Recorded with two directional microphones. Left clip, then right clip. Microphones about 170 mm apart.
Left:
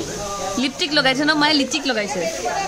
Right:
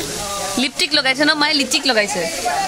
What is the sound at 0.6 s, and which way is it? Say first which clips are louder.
Sizzle: right 1 dB; 25° right (ahead or behind).